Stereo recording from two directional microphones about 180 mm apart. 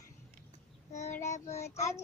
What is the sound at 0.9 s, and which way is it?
Child singing, 40° left (ahead or behind).